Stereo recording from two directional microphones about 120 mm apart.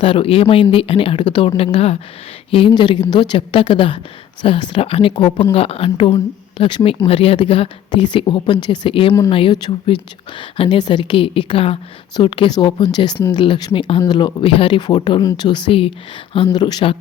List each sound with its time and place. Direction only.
0.0 s a woman's voice: 50° left (ahead or behind)